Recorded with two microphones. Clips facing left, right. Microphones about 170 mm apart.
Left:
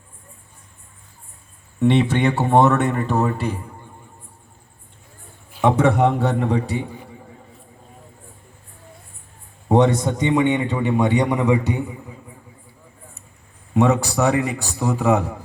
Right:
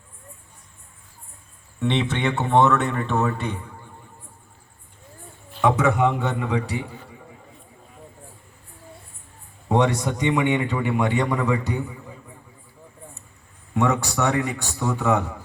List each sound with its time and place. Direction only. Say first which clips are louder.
1.8 s a man's voice: left 6 dB; 5° left (ahead or behind)
2.6 s a man's voice: left 2 dB; 45° left (ahead or behind)
3.2 s a man's voice: left 3 dB; 5° left (ahead or behind)
5.6 s a man's voice: left 3 dB; 30° left (ahead or behind)
9.6 s a sound: left 4 dB; 25° left (ahead or behind)
10.0 s a man's voice: left 3 dB; 25° left (ahead or behind)
13.7 s a man's voice: left 4 dB; 25° left (ahead or behind)